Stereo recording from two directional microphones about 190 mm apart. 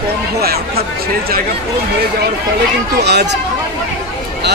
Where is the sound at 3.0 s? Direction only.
60° right (ahead or behind).